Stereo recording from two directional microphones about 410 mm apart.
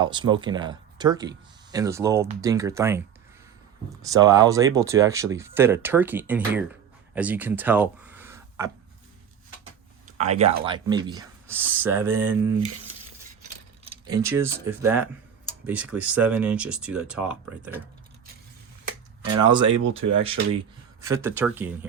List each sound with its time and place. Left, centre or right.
0.0 s speech: centre
4.1 s speech: centre
7.1 s a sound: centre
10.1 s speech: centre
13.8 s speech: centre
19.3 s speech: centre
19.6 s speech: right
20.2 s speech: centre